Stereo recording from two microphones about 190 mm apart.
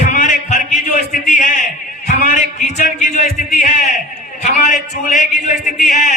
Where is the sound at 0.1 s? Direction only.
40° left (ahead or behind).